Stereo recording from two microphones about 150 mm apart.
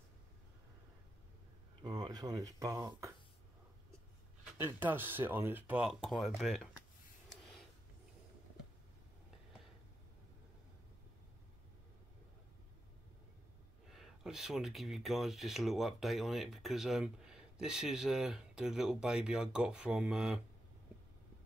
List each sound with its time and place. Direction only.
1.8 s speech: 25° right (ahead or behind)
4.6 s speech: 15° right (ahead or behind)
7.2 s a sound: centre (ahead or behind)
13.9 s speech: centre (ahead or behind)